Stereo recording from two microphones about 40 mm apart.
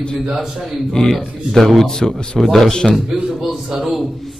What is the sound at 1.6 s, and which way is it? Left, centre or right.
Speech, centre.